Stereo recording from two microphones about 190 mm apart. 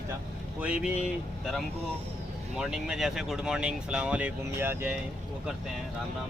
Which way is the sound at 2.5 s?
Centre (ahead or behind).